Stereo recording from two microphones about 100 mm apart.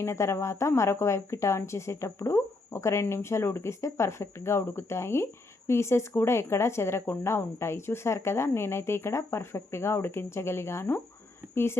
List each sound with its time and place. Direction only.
0.0 s a woman's voice: 30° left (ahead or behind)